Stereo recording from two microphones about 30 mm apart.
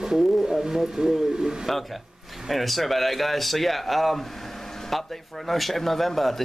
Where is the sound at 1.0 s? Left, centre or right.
Right.